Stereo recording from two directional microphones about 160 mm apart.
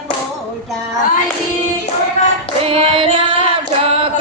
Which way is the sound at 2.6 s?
35° right (ahead or behind).